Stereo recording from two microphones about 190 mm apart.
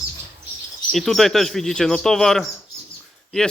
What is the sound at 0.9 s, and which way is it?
A man's voice, centre (ahead or behind).